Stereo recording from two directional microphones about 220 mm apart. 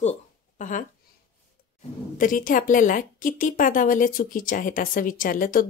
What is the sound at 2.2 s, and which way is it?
A woman's voice, 40° left (ahead or behind).